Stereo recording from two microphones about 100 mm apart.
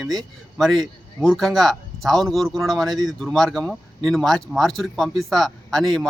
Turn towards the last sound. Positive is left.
turn(degrees=0)  # may be behind; listen again after turning